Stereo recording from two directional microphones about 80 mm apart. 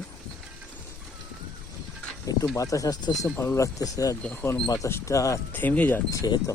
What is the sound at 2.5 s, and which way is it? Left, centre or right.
Speech, left.